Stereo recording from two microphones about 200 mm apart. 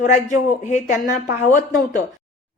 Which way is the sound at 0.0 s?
40° left (ahead or behind).